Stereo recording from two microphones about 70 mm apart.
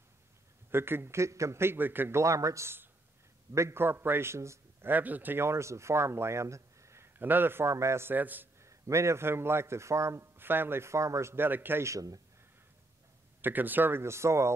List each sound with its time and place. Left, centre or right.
0.7 s a man's voice: right
4.8 s a man's voice: right
7.2 s a man's voice: right
8.1 s a man's voice: right
8.5 s a man's voice: right
11.8 s speech: right
13.4 s a man's voice: right